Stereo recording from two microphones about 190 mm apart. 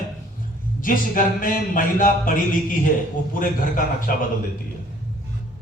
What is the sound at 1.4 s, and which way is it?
Speech, 45° left (ahead or behind).